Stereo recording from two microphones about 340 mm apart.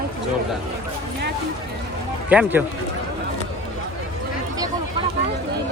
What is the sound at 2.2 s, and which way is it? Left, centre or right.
Speech, centre.